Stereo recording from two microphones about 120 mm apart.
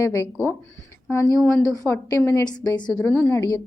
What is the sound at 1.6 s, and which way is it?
Speech, 25° left (ahead or behind).